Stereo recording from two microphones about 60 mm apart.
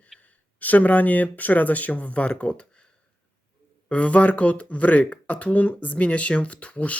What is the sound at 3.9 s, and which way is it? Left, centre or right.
Speech, left.